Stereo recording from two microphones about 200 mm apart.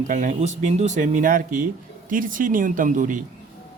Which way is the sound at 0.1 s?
40° right (ahead or behind).